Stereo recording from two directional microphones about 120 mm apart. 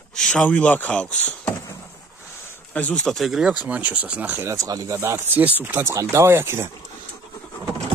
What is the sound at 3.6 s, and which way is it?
Speech, 15° right (ahead or behind).